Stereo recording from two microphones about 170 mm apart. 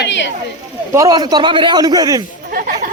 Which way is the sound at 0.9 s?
20° right (ahead or behind).